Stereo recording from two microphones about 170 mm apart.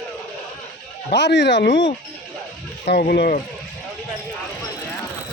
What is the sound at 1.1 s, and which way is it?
Speech, 90° left.